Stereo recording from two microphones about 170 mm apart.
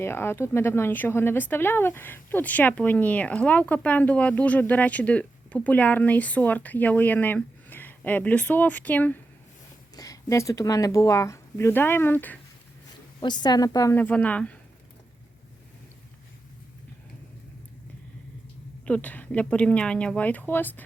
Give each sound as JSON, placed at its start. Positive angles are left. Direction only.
{"t": 0.0, "sound": "speech", "side_deg": 15}
{"t": 9.9, "sound": "speech", "side_deg": 20}
{"t": 13.1, "sound": "speech", "side_deg": 25}
{"t": 18.9, "sound": "speech", "side_deg": 10}